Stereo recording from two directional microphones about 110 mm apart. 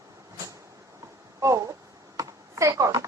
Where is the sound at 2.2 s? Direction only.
30° right (ahead or behind).